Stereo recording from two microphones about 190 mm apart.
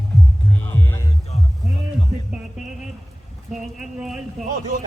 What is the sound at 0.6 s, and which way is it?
Music, 10° left (ahead or behind).